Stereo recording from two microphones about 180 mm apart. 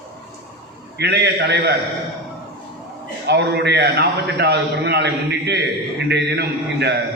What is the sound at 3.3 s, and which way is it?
A man's voice, 70° right (ahead or behind).